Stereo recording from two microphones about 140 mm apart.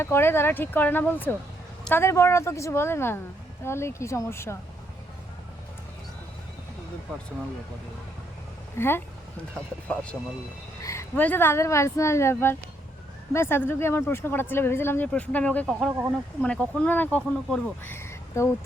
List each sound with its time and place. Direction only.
0.0 s speech: 15° left (ahead or behind)
8.8 s speech: 20° left (ahead or behind)
9.9 s speech: 10° left (ahead or behind)
15.9 s speech: 15° right (ahead or behind)
16.4 s speech: 10° left (ahead or behind)